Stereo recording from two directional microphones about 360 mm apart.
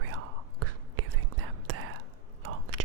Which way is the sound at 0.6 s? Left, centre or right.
Right.